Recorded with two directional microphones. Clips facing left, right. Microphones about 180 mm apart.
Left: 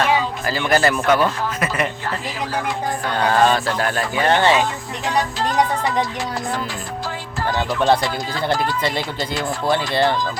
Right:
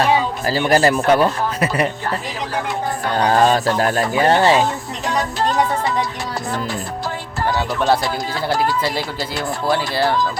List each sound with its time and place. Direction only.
0.0 s speech: 35° right (ahead or behind)
3.2 s speech: 40° right (ahead or behind)
9.6 s speech: 5° right (ahead or behind)